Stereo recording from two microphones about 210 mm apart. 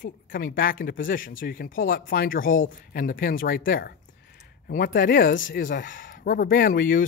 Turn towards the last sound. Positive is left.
turn(degrees=40)  # may be behind; listen again after turning